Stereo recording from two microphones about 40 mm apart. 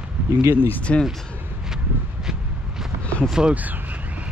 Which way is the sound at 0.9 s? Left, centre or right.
Left.